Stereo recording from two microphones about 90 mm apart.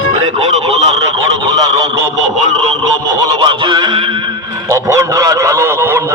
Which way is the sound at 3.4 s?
60° right (ahead or behind).